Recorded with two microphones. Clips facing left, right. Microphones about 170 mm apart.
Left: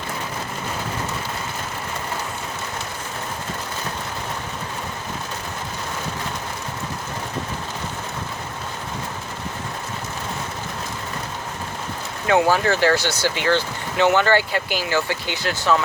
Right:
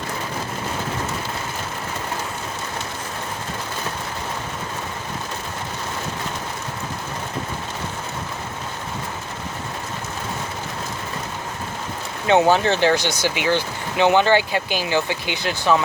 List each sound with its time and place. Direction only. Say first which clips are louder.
12.3 s speech: right 2 dB; 25° right (ahead or behind)